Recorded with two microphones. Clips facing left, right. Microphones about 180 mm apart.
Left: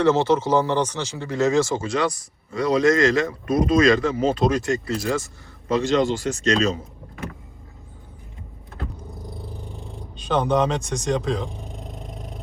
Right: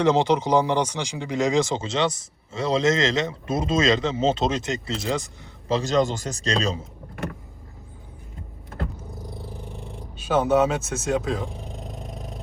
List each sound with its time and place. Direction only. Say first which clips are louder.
0.0 s speech: left 1 dB; 15° right (ahead or behind)
5.6 s a man's voice: left 2 dB; 30° right (ahead or behind)
5.9 s speech: left 1 dB; 45° right (ahead or behind)
10.2 s speech: right 1 dB; 5° right (ahead or behind)